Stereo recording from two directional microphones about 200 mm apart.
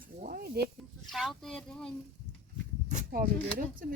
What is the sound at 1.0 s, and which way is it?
Speech, centre (ahead or behind).